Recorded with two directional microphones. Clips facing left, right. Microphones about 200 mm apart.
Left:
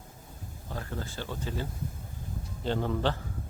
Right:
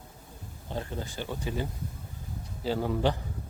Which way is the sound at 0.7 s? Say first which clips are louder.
Right 2 dB; 20° right (ahead or behind).